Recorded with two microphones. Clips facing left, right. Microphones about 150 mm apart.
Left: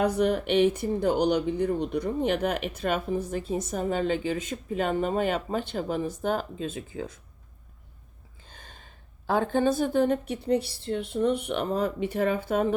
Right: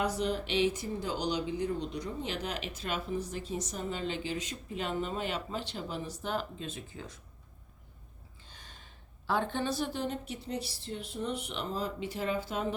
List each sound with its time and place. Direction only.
0.0 s speech: 60° left (ahead or behind)
8.5 s a woman's voice: 50° left (ahead or behind)